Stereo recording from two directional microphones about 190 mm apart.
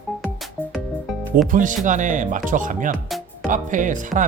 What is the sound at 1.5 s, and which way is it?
Speech, 45° right (ahead or behind).